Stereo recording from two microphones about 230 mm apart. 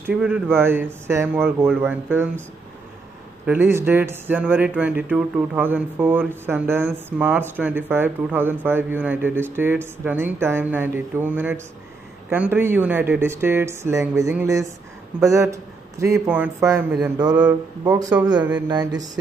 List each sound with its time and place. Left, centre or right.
0.0 s speech: centre
3.4 s speech: centre
18.2 s speech: centre